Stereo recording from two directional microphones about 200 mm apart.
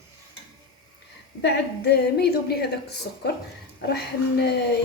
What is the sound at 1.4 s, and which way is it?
A woman's voice, 55° left (ahead or behind).